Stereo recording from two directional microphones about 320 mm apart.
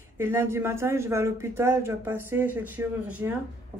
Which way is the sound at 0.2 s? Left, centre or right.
Centre.